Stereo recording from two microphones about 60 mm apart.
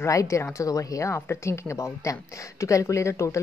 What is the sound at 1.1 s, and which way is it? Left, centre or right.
Speech, left.